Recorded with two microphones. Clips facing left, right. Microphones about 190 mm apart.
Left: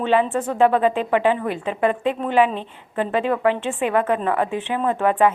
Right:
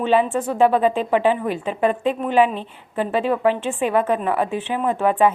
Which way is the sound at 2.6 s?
20° left (ahead or behind).